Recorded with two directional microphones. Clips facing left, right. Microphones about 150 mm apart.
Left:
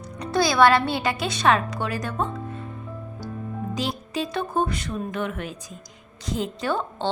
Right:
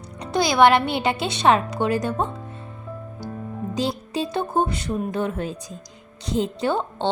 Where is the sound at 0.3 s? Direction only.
20° right (ahead or behind).